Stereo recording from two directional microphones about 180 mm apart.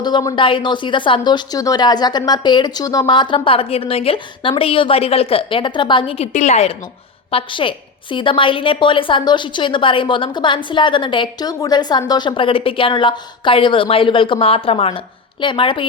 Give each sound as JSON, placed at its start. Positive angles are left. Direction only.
{"t": 0.0, "sound": "a woman's voice", "side_deg": 20}